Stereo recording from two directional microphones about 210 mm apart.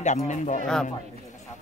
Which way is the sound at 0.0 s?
35° left (ahead or behind).